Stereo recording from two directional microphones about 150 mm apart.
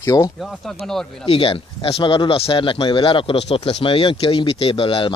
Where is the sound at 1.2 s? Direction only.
40° left (ahead or behind).